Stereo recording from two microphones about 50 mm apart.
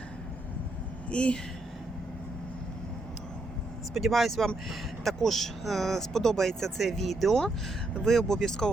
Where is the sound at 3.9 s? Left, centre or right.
Centre.